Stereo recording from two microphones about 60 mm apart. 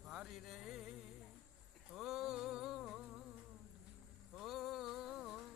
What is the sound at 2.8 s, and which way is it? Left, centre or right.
Humming, centre.